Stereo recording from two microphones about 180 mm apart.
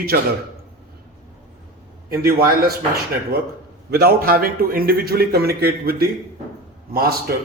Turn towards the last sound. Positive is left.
turn(degrees=-55)  # may be behind; listen again after turning